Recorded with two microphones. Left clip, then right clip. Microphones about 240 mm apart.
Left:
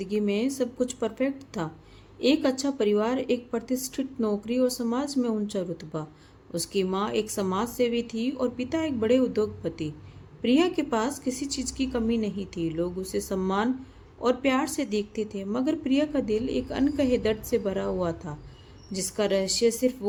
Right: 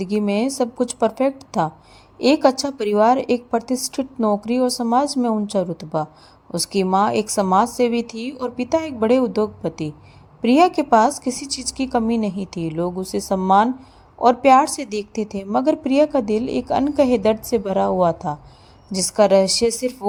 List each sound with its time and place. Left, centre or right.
0.0 s speech: right